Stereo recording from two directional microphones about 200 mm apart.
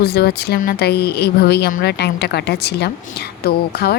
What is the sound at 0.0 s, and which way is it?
Speech, 55° left (ahead or behind).